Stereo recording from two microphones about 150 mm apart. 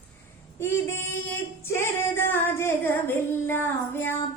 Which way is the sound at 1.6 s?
15° left (ahead or behind).